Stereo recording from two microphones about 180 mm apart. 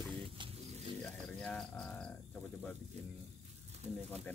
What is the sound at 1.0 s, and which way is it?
Speech, 5° left (ahead or behind).